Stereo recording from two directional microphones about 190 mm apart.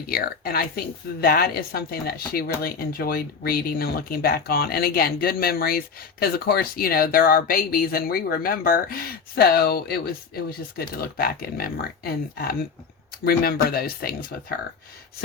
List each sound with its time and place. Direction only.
0.1 s speech: 50° left (ahead or behind)